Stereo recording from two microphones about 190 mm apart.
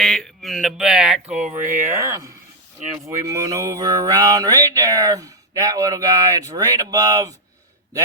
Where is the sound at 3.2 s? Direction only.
15° right (ahead or behind).